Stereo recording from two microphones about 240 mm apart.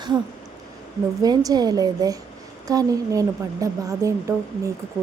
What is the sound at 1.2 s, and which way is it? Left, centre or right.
A woman's voice, centre.